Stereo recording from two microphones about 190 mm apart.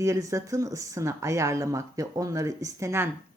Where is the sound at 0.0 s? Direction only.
15° right (ahead or behind).